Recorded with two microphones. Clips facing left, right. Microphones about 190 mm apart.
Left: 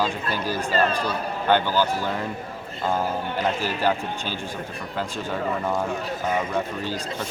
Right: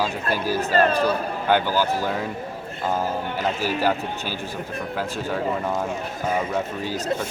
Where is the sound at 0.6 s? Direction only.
45° right (ahead or behind).